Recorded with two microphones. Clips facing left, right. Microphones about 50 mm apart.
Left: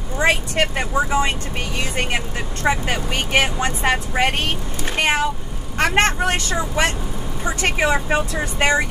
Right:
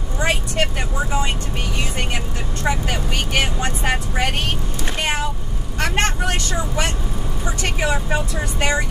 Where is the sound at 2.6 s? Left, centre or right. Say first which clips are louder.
Left 2 dB; left.